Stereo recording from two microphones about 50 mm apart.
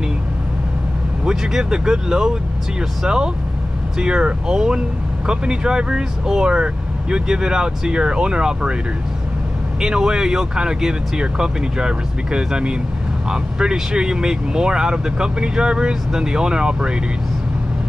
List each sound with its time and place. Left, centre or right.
1.2 s speech: centre
9.8 s speech: centre